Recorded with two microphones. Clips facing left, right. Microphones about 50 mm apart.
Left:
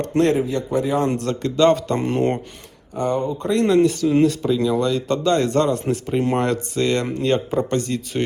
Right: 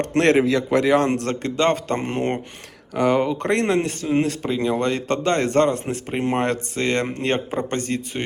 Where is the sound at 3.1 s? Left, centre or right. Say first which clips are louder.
Right 3 dB; right.